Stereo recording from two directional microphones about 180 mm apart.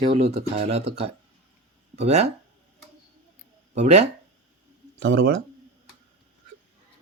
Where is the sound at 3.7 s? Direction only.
40° right (ahead or behind).